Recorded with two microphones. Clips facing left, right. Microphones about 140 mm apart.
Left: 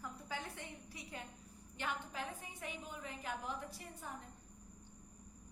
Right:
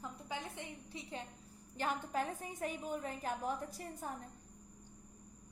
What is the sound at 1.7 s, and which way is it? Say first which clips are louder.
A woman's voice: right 6 dB; 45° right (ahead or behind).